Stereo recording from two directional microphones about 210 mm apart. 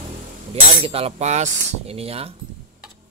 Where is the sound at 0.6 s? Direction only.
25° right (ahead or behind).